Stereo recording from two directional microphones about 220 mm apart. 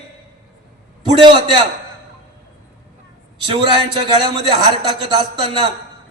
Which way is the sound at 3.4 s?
20° right (ahead or behind).